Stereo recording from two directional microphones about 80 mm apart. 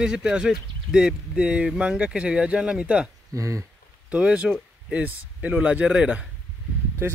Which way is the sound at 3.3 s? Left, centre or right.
Right.